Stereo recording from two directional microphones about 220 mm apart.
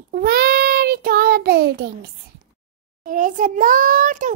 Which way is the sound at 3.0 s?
35° right (ahead or behind).